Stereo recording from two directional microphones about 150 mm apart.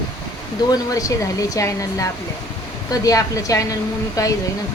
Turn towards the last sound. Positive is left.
turn(degrees=20)  # may be behind; listen again after turning